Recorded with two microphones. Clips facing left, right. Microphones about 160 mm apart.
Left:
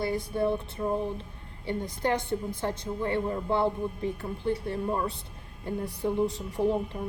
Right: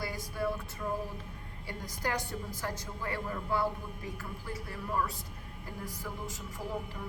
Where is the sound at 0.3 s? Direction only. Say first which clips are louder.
Left 5 dB; 25° left (ahead or behind).